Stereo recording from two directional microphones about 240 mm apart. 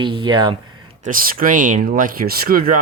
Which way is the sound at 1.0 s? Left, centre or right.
Right.